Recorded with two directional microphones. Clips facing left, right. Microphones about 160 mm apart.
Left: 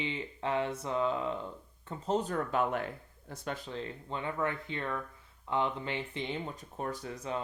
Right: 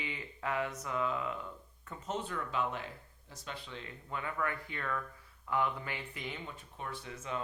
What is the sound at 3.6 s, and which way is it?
Speech, 35° left (ahead or behind).